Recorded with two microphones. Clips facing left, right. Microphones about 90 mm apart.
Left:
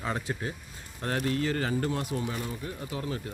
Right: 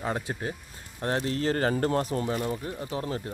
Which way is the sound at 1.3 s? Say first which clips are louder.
Right 3 dB; 40° right (ahead or behind).